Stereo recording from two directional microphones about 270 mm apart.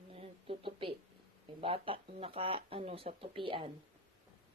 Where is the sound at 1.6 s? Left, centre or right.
Centre.